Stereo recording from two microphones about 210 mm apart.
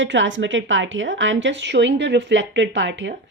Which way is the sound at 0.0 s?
60° right (ahead or behind).